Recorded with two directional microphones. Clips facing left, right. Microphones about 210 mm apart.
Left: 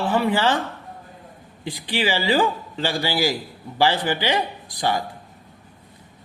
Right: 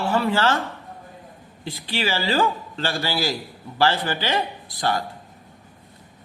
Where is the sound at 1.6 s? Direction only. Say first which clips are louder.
Left 2 dB; 15° left (ahead or behind).